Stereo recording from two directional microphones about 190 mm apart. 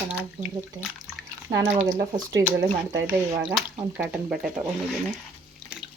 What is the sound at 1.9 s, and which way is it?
Speech, 15° right (ahead or behind).